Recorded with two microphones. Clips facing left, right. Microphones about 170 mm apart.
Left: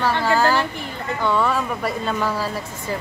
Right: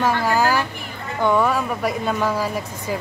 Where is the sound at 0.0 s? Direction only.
15° right (ahead or behind).